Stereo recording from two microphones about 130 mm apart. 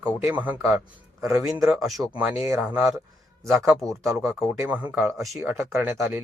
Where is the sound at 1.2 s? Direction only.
25° right (ahead or behind).